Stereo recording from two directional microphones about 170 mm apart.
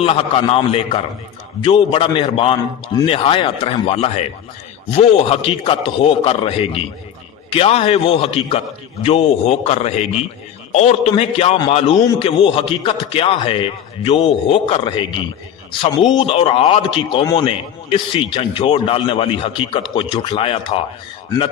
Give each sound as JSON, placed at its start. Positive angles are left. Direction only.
{"t": 0.0, "sound": "a man's voice", "side_deg": 35}